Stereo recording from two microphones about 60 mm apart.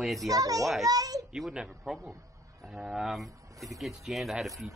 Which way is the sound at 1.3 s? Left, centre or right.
Centre.